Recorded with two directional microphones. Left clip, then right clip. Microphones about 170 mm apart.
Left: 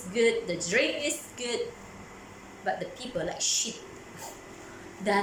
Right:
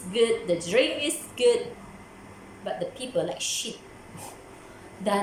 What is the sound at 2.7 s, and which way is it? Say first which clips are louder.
Speech: right 1 dB; 15° right (ahead or behind).